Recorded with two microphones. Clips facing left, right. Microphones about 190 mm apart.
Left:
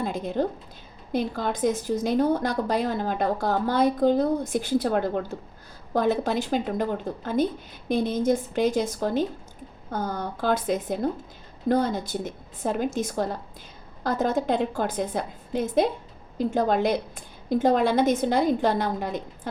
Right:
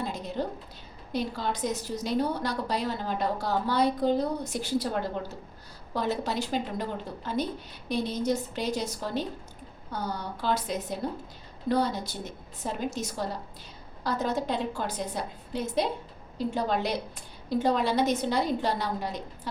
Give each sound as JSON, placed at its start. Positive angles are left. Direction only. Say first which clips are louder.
{"t": 0.0, "sound": "a woman's voice", "louder": "left 6 dB", "side_deg": 50}